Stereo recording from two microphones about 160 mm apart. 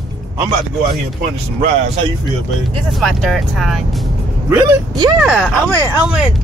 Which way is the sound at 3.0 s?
Centre (ahead or behind).